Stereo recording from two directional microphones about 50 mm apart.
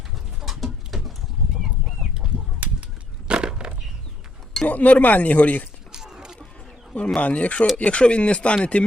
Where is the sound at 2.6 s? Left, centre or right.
Right.